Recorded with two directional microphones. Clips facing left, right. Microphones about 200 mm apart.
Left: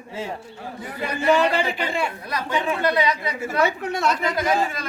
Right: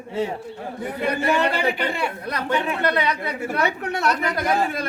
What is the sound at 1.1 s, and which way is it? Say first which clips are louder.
Speech: left 2 dB; 65° right (ahead or behind).